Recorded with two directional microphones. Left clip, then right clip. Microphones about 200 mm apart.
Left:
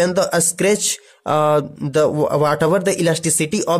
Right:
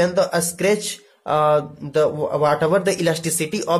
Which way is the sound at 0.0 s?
45° left (ahead or behind).